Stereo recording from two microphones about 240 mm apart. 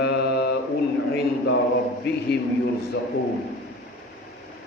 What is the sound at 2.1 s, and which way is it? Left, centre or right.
Speech, left.